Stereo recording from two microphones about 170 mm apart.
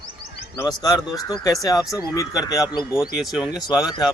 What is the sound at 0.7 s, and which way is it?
Speech, 25° left (ahead or behind).